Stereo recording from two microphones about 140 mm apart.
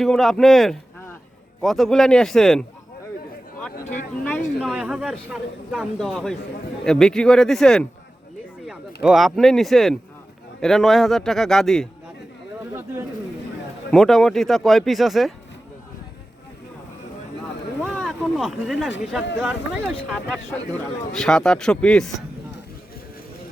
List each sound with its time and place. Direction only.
0.0 s speech: centre (ahead or behind)
4.6 s speech: 5° right (ahead or behind)
12.7 s speech: 20° right (ahead or behind)
13.9 s speech: 5° left (ahead or behind)
17.9 s speech: 5° left (ahead or behind)